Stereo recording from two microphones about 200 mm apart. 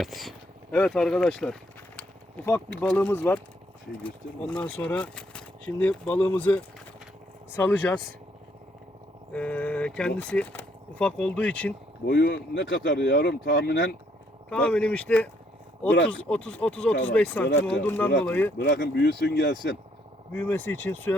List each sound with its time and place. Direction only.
0.0 s speech: centre (ahead or behind)
2.8 s speech: 10° left (ahead or behind)
4.4 s speech: 5° left (ahead or behind)
9.3 s speech: 5° left (ahead or behind)
12.0 s speech: 55° left (ahead or behind)
14.5 s speech: 5° left (ahead or behind)
18.5 s speech: 60° left (ahead or behind)
20.3 s speech: 10° left (ahead or behind)